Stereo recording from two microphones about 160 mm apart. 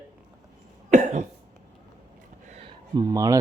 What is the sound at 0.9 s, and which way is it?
Cough, 50° right (ahead or behind).